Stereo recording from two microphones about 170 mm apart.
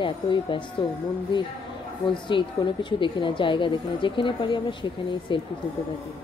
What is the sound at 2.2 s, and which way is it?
Speech, 30° left (ahead or behind).